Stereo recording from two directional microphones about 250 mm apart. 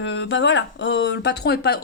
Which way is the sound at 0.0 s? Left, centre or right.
Left.